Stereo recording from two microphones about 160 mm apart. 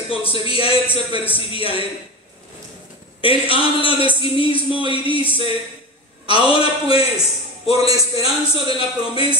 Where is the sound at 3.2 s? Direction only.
35° left (ahead or behind).